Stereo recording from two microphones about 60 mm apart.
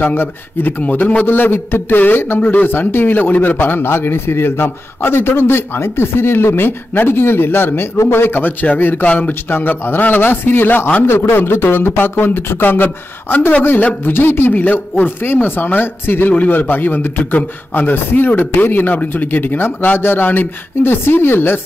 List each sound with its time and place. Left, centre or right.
0.0 s a man's voice: left